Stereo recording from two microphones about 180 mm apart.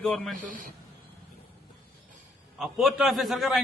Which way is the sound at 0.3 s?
50° right (ahead or behind).